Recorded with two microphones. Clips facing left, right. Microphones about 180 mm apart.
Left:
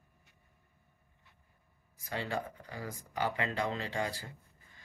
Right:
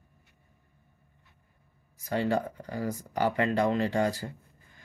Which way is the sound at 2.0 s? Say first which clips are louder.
Right 9 dB; 45° right (ahead or behind).